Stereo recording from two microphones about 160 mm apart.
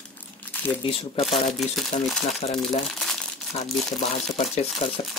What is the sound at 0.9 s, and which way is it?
Speech, 35° left (ahead or behind).